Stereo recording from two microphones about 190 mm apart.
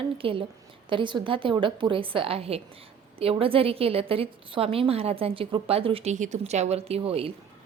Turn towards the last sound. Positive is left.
turn(degrees=-30)  # may be behind; listen again after turning